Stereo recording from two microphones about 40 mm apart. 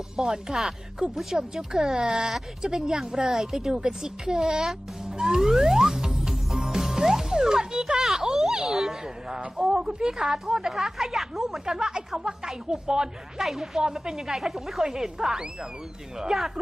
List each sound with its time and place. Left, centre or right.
0.2 s speech: centre
5.1 s music: centre
10.0 s a woman's voice: centre